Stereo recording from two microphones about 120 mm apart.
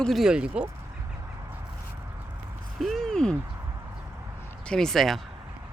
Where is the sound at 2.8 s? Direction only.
Centre (ahead or behind).